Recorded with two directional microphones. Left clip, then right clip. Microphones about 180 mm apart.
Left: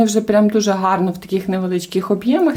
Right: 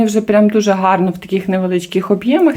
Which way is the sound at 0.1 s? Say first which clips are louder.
Right 3 dB; 10° right (ahead or behind).